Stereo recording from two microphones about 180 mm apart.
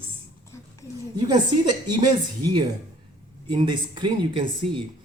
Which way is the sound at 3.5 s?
25° right (ahead or behind).